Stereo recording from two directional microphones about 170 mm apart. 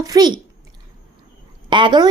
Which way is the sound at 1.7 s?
25° right (ahead or behind).